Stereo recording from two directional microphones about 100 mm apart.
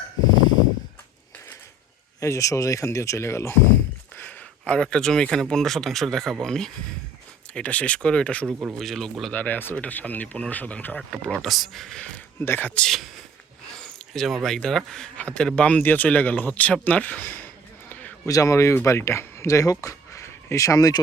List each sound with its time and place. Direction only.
2.2 s speech: 30° left (ahead or behind)
4.2 s speech: 15° left (ahead or behind)
9.3 s speech: 15° left (ahead or behind)
12.4 s speech: 20° left (ahead or behind)
12.8 s speech: centre (ahead or behind)
18.3 s speech: 30° left (ahead or behind)